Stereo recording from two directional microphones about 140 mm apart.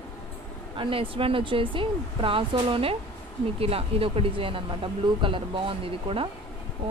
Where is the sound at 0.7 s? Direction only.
40° right (ahead or behind).